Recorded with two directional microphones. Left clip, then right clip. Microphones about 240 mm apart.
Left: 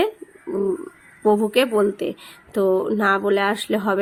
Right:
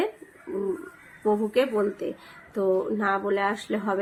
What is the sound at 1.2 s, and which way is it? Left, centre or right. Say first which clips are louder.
Speech: left 6 dB; left.